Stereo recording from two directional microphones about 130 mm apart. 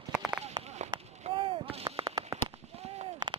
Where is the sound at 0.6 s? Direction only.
60° right (ahead or behind).